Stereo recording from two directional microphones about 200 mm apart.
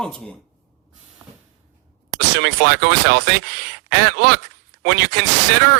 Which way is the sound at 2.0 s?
55° right (ahead or behind).